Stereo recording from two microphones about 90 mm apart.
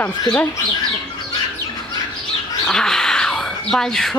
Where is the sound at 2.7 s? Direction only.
5° left (ahead or behind).